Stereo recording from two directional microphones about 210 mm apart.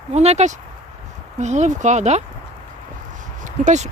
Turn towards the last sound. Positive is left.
turn(degrees=-35)  # may be behind; listen again after turning